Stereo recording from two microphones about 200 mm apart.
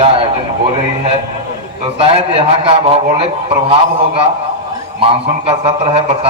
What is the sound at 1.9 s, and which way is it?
A man's voice, 30° right (ahead or behind).